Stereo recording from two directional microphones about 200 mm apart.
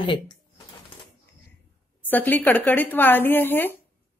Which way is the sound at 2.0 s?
10° left (ahead or behind).